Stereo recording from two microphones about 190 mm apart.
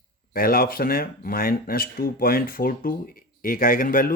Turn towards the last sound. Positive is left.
turn(degrees=50)  # may be behind; listen again after turning